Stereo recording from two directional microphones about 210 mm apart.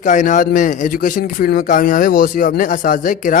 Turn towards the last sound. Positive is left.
turn(degrees=40)  # may be behind; listen again after turning